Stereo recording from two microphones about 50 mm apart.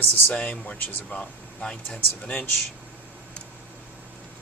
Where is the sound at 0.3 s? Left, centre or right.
Left.